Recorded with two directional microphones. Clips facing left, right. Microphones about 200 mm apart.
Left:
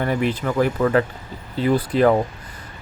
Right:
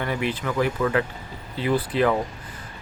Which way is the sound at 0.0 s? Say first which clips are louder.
Left 5 dB; 45° left (ahead or behind).